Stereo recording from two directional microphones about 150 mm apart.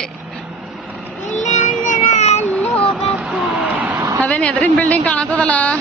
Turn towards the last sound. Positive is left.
turn(degrees=10)  # may be behind; listen again after turning